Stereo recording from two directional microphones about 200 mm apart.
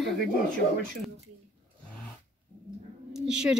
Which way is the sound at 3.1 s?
5° right (ahead or behind).